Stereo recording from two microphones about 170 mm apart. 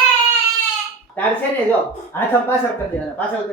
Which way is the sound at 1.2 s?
10° left (ahead or behind).